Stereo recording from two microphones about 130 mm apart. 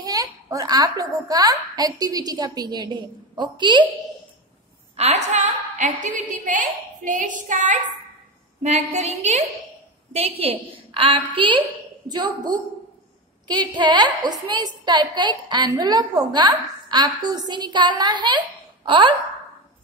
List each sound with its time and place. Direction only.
0.0 s a woman's voice: 30° right (ahead or behind)
4.9 s a woman's voice: 55° right (ahead or behind); by 7.8 s 80° right
8.6 s a sound: 60° right (ahead or behind)
10.1 s a woman's voice: 50° right (ahead or behind)